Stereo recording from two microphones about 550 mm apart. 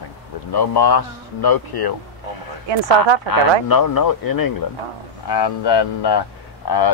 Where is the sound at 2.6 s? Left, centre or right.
Right.